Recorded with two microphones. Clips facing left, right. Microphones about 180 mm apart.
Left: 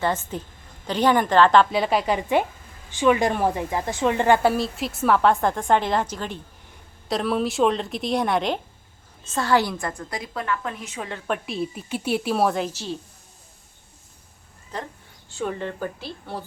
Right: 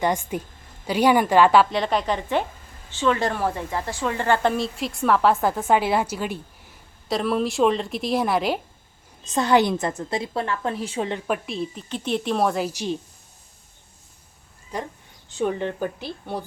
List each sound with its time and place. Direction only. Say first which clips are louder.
0.0 s a woman's voice: right 2 dB; 15° right (ahead or behind)
1.7 s speech: left 1 dB; 5° left (ahead or behind)
4.4 s a woman's voice: left 1 dB; centre (ahead or behind)
9.2 s a woman's voice: right 3 dB; 20° right (ahead or behind)
11.3 s a woman's voice: even; 5° left (ahead or behind)
12.7 s a woman's voice: right 4 dB; 15° right (ahead or behind)
14.7 s a woman's voice: right 2 dB; 10° right (ahead or behind)